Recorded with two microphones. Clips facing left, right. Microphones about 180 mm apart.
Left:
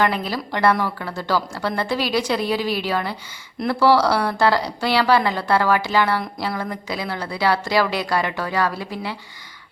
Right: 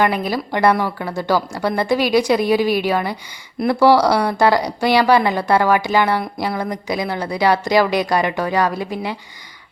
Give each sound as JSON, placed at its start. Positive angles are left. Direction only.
{"t": 0.0, "sound": "a woman's voice", "side_deg": -15}